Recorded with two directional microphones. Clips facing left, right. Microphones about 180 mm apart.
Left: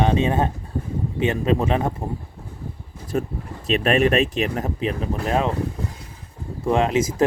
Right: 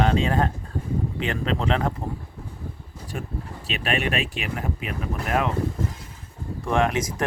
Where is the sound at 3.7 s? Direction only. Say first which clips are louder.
Left 8 dB; 40° left (ahead or behind).